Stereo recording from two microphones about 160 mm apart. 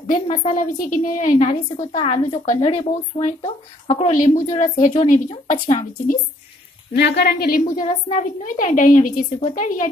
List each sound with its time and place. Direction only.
0.0 s a woman's voice: 45° left (ahead or behind)
1.9 s a woman's voice: 45° left (ahead or behind)
7.0 s a woman's voice: 90° left
7.7 s a woman's voice: 50° left (ahead or behind)